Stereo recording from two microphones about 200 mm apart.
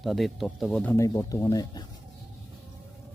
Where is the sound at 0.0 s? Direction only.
Centre (ahead or behind).